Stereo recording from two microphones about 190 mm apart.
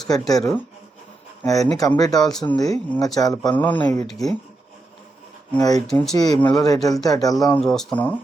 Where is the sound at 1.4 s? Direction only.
20° left (ahead or behind).